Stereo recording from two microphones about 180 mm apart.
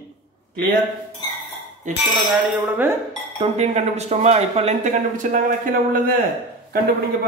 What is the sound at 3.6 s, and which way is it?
Speech, 40° right (ahead or behind).